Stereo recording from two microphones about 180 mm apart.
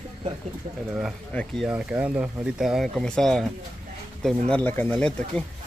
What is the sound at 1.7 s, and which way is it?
Speech, 10° right (ahead or behind).